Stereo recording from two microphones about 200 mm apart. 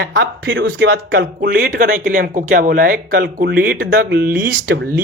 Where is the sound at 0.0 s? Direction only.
55° right (ahead or behind).